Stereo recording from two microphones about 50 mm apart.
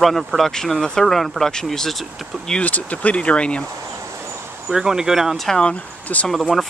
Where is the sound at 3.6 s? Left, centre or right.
Right.